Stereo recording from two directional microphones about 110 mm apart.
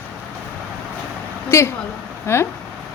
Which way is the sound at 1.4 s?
25° left (ahead or behind).